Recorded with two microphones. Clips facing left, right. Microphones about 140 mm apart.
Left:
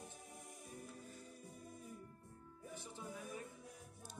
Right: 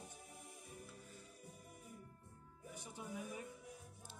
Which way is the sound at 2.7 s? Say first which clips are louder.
Right 1 dB; 15° right (ahead or behind).